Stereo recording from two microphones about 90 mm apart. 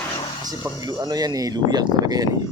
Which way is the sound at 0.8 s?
45° right (ahead or behind).